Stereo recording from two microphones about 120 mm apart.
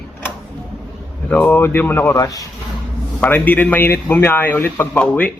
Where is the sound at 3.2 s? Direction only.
15° left (ahead or behind).